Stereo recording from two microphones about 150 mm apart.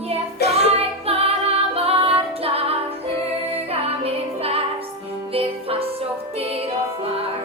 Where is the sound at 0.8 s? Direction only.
40° right (ahead or behind).